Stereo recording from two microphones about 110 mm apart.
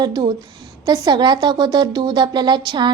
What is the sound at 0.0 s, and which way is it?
A woman's voice, 40° right (ahead or behind).